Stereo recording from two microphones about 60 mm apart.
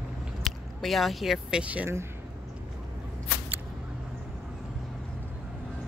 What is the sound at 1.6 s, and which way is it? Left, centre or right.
Speech, right.